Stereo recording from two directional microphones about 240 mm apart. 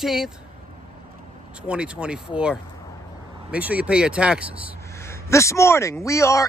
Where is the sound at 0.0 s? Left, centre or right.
Centre.